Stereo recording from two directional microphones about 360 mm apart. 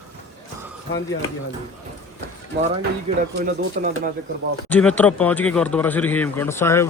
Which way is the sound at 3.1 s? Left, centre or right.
Centre.